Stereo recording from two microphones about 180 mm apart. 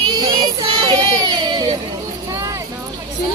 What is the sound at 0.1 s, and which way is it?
Child singing, 25° right (ahead or behind).